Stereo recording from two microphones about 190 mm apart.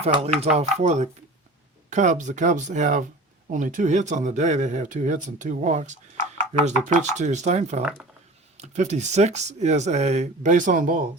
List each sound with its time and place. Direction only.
0.0 s speech: 35° right (ahead or behind)
7.8 s speech: 5° right (ahead or behind)
8.5 s speech: 40° right (ahead or behind)